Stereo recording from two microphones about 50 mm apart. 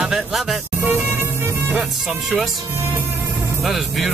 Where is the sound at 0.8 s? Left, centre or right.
Right.